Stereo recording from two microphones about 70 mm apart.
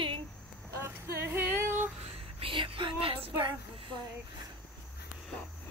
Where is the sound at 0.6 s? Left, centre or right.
Right.